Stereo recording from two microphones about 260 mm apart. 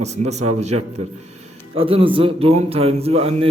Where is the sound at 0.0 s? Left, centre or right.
Right.